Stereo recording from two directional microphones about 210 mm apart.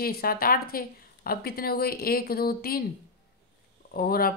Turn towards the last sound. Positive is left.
turn(degrees=45)  # may be behind; listen again after turning